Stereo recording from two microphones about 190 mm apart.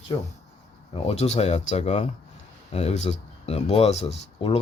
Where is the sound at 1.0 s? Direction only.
35° left (ahead or behind).